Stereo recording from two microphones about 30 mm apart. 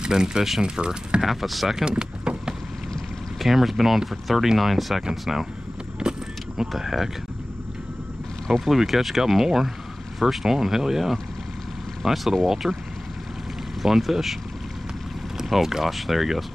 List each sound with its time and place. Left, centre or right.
0.0 s speech: right
1.2 s speech: centre
1.9 s vehicle: right
3.3 s speech: centre
5.9 s vehicle: right
6.9 s speech: centre
8.5 s speech: centre
12.6 s speech: centre
13.8 s speech: centre
15.5 s speech: centre